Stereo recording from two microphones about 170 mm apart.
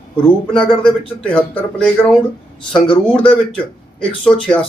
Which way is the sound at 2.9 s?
5° left (ahead or behind).